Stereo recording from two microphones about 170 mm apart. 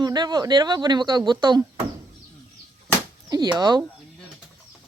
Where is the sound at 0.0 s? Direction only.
25° right (ahead or behind).